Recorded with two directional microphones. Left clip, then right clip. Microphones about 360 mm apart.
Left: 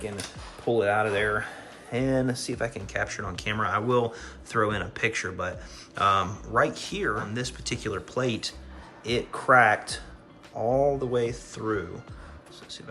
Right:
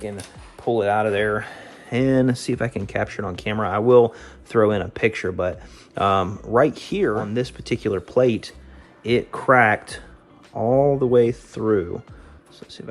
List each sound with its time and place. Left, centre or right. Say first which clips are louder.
0.7 s speech: right 4 dB; centre